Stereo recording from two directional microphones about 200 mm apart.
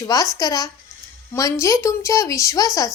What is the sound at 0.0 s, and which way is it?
A woman's voice, 20° left (ahead or behind).